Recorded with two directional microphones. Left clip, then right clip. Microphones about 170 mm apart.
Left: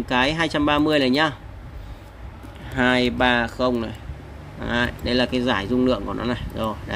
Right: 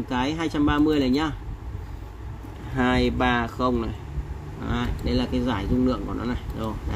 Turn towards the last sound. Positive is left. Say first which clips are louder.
# left 5 dB
turn(degrees=30)  # may be behind; listen again after turning